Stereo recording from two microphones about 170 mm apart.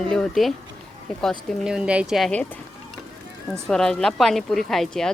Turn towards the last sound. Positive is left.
turn(degrees=0)  # may be behind; listen again after turning